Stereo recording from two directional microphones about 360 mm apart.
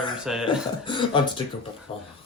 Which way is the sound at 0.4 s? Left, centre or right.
Centre.